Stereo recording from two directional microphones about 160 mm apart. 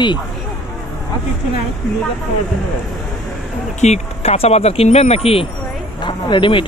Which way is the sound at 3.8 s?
40° left (ahead or behind).